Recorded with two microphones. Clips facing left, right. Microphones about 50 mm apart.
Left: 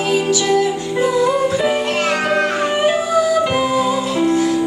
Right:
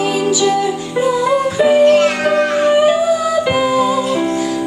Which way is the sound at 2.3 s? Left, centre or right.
Centre.